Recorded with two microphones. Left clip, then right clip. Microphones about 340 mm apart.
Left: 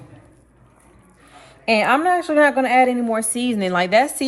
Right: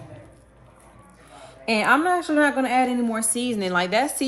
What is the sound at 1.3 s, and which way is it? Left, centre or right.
Speech, centre.